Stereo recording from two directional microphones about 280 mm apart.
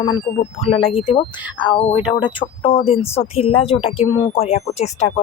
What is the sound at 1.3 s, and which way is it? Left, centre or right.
Speech, centre.